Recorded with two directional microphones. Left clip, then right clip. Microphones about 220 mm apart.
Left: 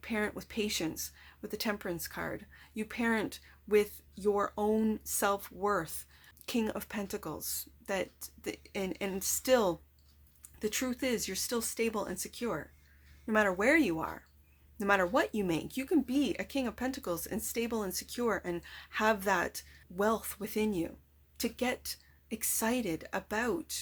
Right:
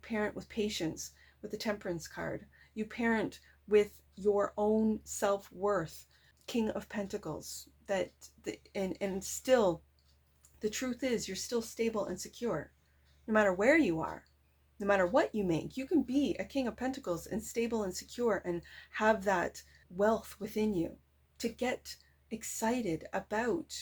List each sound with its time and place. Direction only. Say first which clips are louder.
0.0 s speech: left 1 dB; 20° left (ahead or behind)